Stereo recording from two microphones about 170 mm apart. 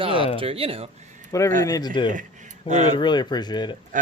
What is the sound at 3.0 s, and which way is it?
Speech, 25° left (ahead or behind).